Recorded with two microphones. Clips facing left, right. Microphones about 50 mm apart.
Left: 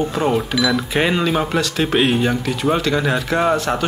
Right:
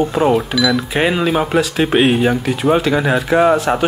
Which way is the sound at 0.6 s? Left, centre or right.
Centre.